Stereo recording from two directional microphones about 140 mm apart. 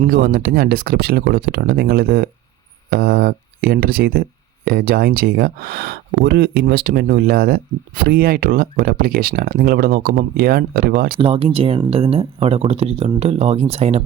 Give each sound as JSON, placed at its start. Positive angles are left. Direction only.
{"t": 0.0, "sound": "speech", "side_deg": -90}
{"t": 11.2, "sound": "speech", "side_deg": -40}